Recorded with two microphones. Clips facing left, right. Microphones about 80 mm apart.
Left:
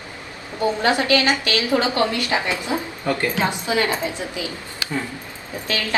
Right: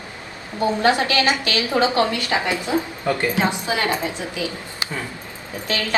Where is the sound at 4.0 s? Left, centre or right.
Left.